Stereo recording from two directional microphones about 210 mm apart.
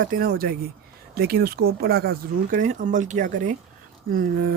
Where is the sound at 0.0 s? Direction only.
45° right (ahead or behind).